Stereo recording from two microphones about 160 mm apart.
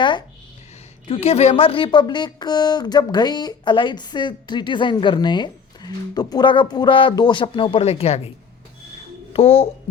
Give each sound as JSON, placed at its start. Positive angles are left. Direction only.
{"t": 0.0, "sound": "speech", "side_deg": 30}
{"t": 9.3, "sound": "a child's voice", "side_deg": 35}